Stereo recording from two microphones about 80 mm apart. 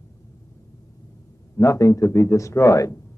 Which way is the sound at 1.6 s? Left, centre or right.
Left.